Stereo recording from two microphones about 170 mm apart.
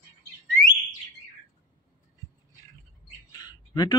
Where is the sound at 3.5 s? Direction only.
25° left (ahead or behind).